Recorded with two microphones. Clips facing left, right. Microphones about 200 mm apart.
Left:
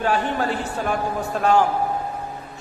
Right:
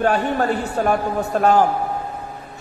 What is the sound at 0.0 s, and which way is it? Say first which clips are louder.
A man's voice: right 3 dB; 45° right (ahead or behind).